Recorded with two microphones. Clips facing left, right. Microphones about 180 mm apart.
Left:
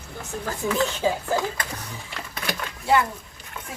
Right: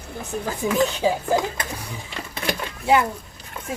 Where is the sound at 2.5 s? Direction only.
20° right (ahead or behind).